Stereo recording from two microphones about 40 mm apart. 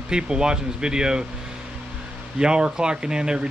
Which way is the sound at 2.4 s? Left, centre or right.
Right.